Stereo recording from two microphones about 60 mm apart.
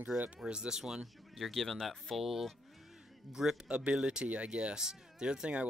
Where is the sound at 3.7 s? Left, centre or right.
Centre.